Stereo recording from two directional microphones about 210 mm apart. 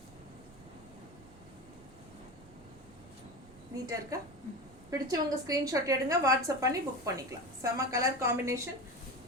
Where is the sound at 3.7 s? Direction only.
15° right (ahead or behind).